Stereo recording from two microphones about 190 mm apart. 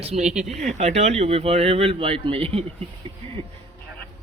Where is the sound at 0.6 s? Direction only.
35° right (ahead or behind).